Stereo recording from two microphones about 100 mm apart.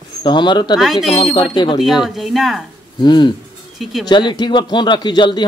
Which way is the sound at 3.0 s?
50° left (ahead or behind).